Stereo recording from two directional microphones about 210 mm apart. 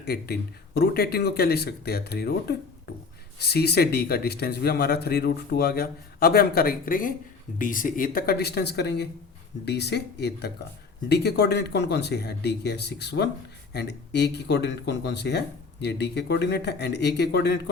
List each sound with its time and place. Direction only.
0.0 s speech: 50° left (ahead or behind)